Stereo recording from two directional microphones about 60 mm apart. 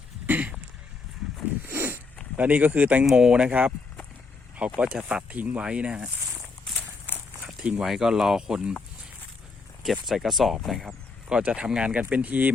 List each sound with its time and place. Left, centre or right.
0.3 s speech: right
1.6 s zipper: right
2.3 s speech: right
4.8 s speech: centre
7.4 s a sound: centre
7.9 s speech: centre
9.8 s speech: centre
11.3 s speech: centre